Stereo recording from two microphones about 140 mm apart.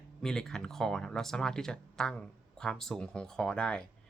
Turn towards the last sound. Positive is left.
turn(degrees=5)  # may be behind; listen again after turning